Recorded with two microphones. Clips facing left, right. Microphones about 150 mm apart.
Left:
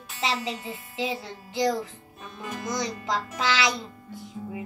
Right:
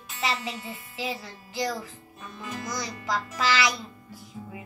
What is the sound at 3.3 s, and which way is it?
Speech, 25° left (ahead or behind).